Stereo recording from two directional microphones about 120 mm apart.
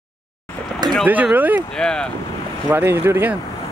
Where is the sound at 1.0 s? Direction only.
15° right (ahead or behind).